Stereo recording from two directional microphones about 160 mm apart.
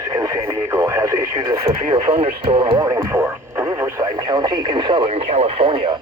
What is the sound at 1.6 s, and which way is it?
Speech, 35° right (ahead or behind).